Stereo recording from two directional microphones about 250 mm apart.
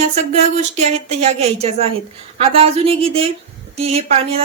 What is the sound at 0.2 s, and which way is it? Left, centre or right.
A woman's voice, right.